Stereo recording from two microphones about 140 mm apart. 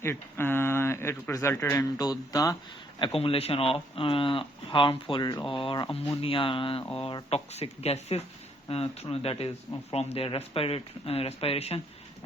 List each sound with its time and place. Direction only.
0.0 s speech: 15° left (ahead or behind)
3.0 s speech: 40° left (ahead or behind)